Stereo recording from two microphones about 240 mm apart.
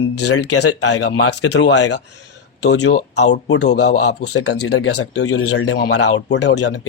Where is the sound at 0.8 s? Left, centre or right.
Left.